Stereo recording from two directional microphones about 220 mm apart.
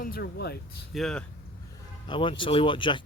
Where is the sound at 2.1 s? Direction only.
20° left (ahead or behind).